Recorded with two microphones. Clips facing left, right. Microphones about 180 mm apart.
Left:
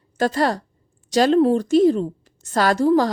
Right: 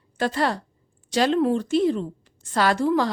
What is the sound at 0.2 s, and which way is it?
A woman's voice, 40° left (ahead or behind).